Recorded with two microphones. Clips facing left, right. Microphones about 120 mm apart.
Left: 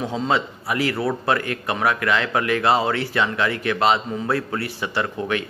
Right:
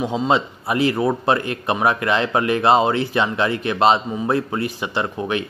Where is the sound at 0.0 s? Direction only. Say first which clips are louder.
Right 3 dB; 20° right (ahead or behind).